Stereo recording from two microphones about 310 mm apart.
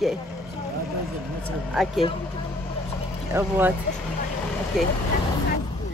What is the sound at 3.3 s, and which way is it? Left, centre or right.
Speech, centre.